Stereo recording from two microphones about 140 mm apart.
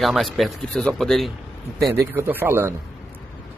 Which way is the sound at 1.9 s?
15° right (ahead or behind).